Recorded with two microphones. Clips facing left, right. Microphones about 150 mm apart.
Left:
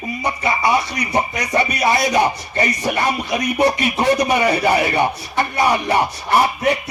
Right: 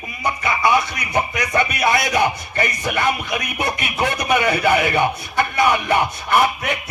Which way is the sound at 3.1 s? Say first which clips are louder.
Left 2 dB; 35° left (ahead or behind).